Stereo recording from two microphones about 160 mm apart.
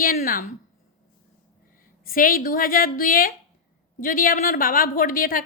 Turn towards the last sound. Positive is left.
turn(degrees=60)  # may be behind; listen again after turning